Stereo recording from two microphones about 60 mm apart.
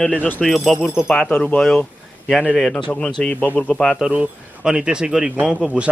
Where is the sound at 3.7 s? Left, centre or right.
Centre.